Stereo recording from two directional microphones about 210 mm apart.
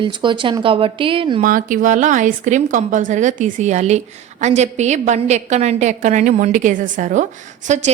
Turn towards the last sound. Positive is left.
turn(degrees=-35)  # may be behind; listen again after turning